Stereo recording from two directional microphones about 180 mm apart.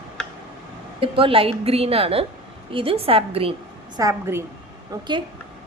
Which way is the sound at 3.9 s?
20° right (ahead or behind).